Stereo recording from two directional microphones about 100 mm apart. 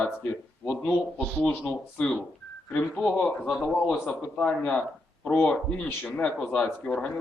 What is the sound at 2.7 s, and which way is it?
Speech, 20° left (ahead or behind).